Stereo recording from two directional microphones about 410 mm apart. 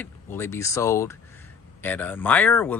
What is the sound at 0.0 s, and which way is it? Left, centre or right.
Speech, centre.